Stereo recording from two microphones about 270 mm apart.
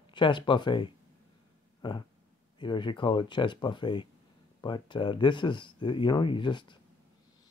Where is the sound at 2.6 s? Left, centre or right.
Centre.